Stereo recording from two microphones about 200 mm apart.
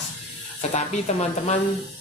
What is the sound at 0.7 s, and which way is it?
Speech, 35° left (ahead or behind).